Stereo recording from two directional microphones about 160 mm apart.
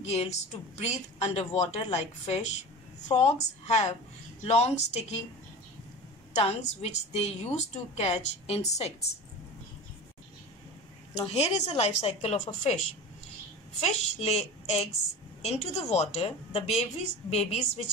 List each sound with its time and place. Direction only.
0.0 s a woman's voice: 45° left (ahead or behind)
6.3 s a woman's voice: 40° left (ahead or behind)
11.1 s a woman's voice: 40° left (ahead or behind)
13.7 s a woman's voice: 45° left (ahead or behind)